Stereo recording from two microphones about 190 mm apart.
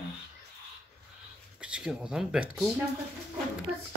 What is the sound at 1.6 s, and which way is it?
Speech, 5° right (ahead or behind).